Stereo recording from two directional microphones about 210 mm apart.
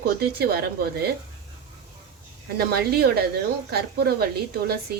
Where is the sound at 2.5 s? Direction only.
50° right (ahead or behind).